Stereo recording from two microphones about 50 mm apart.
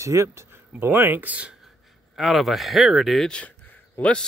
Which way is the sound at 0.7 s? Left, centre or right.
Right.